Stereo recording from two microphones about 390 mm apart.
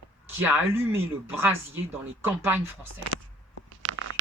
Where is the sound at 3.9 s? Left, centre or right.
Right.